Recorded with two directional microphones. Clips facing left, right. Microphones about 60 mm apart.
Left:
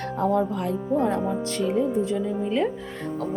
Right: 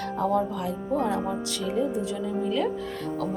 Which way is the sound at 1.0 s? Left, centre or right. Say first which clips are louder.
Left 3 dB; left.